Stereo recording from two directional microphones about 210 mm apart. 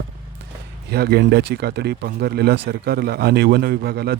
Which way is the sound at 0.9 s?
50° right (ahead or behind).